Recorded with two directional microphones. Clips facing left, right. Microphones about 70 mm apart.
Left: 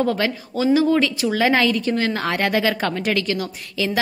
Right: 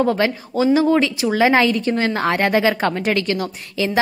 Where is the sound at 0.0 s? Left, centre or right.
Right.